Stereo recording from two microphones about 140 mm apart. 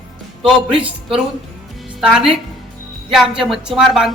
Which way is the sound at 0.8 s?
40° right (ahead or behind).